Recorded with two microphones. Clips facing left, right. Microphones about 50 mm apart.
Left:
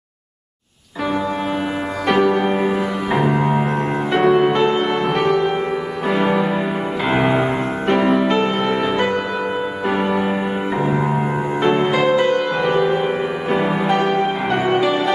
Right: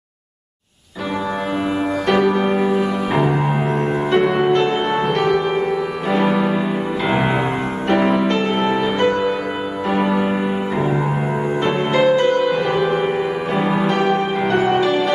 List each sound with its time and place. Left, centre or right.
2.4 s music: centre
7.1 s music: centre
9.8 s music: centre
10.8 s music: left
11.9 s music: centre